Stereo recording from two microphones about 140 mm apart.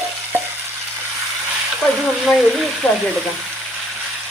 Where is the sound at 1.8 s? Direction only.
Centre (ahead or behind).